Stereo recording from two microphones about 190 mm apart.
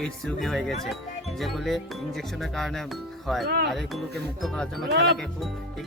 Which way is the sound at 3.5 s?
60° right (ahead or behind).